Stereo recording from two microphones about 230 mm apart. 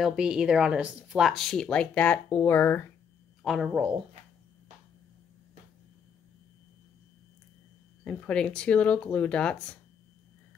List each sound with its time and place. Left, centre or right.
0.0 s speech: centre
3.4 s speech: centre
8.0 s speech: centre